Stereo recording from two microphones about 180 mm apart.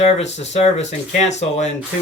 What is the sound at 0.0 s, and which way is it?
Speech, 40° left (ahead or behind).